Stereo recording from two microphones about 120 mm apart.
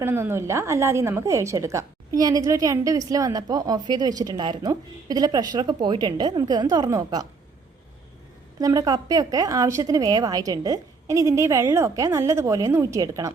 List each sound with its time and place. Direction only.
0.0 s a woman's voice: 20° right (ahead or behind)
8.5 s speech: 30° right (ahead or behind)